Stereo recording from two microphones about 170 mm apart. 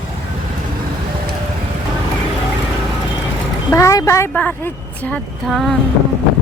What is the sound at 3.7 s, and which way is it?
Speech, 20° left (ahead or behind).